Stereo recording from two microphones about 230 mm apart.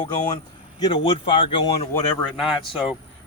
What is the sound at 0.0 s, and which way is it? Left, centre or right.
Speech, centre.